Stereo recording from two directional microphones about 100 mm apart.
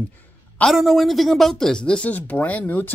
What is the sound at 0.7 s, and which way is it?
Speech, centre (ahead or behind).